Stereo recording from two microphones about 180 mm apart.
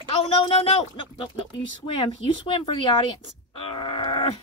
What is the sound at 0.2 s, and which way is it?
Speech, 30° left (ahead or behind).